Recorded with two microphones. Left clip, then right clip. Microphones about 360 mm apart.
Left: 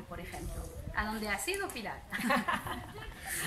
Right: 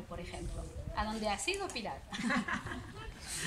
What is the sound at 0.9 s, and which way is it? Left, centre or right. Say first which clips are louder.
Speech: left 1 dB; centre.